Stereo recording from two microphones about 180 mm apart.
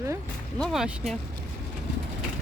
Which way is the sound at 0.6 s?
Centre (ahead or behind).